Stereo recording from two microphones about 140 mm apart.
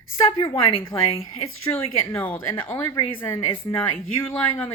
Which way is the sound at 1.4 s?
20° left (ahead or behind).